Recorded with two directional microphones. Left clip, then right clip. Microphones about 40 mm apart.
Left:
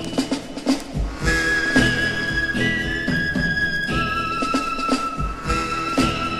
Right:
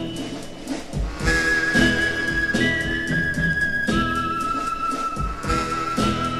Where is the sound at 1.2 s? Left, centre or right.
Left.